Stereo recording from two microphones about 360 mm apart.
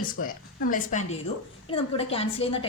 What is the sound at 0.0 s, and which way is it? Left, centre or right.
A woman's voice, left.